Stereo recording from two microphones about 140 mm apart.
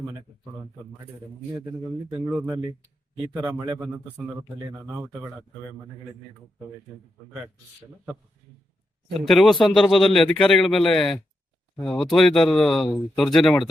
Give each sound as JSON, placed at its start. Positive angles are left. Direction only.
{"t": 2.2, "sound": "speech", "side_deg": -10}
{"t": 3.5, "sound": "speech", "side_deg": -30}
{"t": 9.1, "sound": "a man's voice", "side_deg": 0}